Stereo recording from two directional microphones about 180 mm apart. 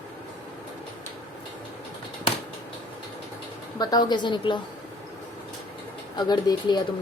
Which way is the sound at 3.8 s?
20° left (ahead or behind).